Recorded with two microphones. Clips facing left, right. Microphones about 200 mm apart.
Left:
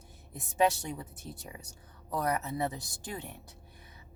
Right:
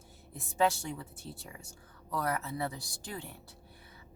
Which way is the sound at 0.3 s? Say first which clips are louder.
Left 2 dB; 20° left (ahead or behind).